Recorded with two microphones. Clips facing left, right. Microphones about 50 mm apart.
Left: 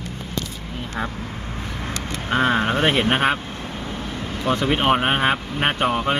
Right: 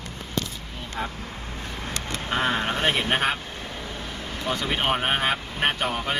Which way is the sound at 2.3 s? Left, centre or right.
Left.